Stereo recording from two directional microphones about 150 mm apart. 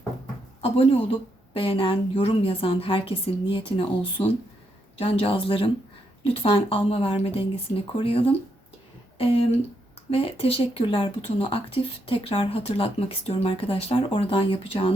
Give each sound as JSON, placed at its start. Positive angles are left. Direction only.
{"t": 1.5, "sound": "speech", "side_deg": 35}